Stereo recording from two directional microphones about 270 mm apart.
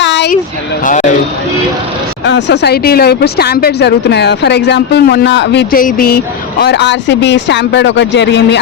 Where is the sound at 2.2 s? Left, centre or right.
Left.